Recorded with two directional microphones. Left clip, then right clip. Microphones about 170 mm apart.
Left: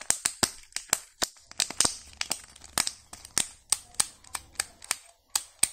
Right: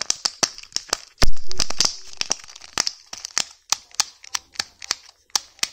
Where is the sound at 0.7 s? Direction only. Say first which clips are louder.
Right 7 dB; 30° right (ahead or behind).